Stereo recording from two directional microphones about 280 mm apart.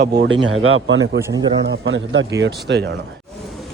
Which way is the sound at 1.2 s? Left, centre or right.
Centre.